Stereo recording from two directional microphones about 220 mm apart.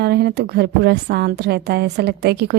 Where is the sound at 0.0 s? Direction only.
50° right (ahead or behind).